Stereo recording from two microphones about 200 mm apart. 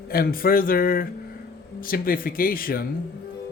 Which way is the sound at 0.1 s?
45° left (ahead or behind).